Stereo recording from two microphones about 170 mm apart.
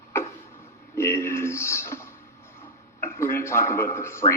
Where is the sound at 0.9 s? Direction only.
15° left (ahead or behind).